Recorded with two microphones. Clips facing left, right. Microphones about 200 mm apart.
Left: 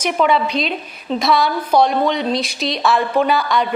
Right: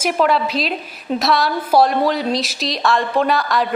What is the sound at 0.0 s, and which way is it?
A woman's voice, 5° right (ahead or behind).